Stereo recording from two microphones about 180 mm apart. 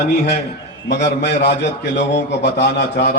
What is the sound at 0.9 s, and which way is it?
A man's voice, 70° left (ahead or behind).